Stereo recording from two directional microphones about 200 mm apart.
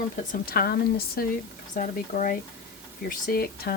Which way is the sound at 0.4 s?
50° left (ahead or behind).